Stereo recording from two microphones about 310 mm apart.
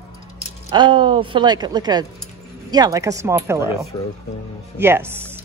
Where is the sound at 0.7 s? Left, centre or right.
Centre.